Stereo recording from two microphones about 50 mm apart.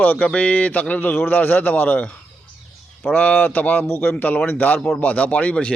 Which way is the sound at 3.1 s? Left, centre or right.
Left.